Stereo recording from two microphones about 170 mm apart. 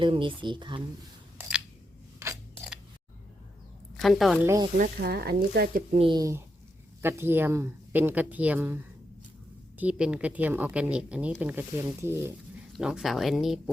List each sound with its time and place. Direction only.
0.0 s speech: 30° right (ahead or behind)
2.1 s scissors: 15° right (ahead or behind)
3.9 s a woman's voice: centre (ahead or behind)
4.4 s a woman's voice: 15° right (ahead or behind)
4.8 s speech: 65° right (ahead or behind)
5.9 s a woman's voice: 30° right (ahead or behind); by 12.3 s 15° right (ahead or behind)
12.7 s speech: 5° right (ahead or behind)